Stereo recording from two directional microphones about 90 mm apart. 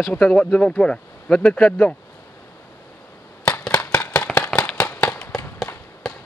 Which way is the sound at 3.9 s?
20° left (ahead or behind).